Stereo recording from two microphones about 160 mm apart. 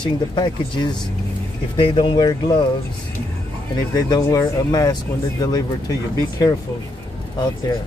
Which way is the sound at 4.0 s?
25° left (ahead or behind).